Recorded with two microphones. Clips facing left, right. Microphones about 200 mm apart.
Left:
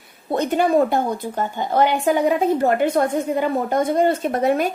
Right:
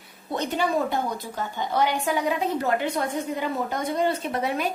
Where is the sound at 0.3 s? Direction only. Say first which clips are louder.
Left 7 dB; 55° left (ahead or behind).